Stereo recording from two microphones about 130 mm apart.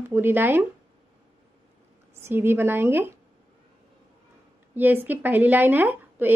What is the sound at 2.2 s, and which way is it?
Speech, 20° right (ahead or behind).